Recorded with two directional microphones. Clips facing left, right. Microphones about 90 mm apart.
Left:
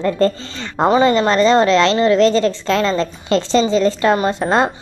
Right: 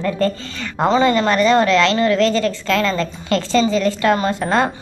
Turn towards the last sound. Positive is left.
turn(degrees=25)  # may be behind; listen again after turning